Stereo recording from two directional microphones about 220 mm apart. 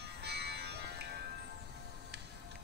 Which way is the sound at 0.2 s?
50° right (ahead or behind).